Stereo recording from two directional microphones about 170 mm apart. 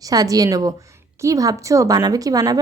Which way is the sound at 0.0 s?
20° right (ahead or behind).